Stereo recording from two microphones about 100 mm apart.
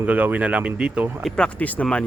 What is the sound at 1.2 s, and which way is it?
Speech, 10° left (ahead or behind).